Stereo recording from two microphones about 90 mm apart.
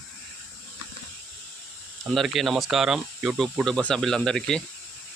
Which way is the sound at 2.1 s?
Centre (ahead or behind).